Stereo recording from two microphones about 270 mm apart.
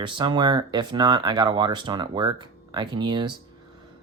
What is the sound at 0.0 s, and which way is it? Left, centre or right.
Speech, centre.